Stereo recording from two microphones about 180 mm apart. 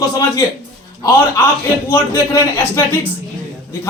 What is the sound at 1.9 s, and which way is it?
A man's voice, 15° left (ahead or behind).